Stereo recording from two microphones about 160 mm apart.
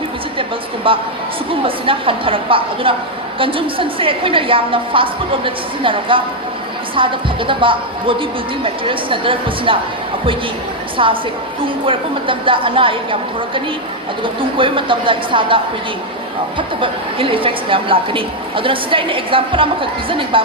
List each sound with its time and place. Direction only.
0.9 s a woman's voice: 35° right (ahead or behind)
10.9 s a woman's voice: 30° right (ahead or behind)
14.6 s a woman's voice: 30° right (ahead or behind)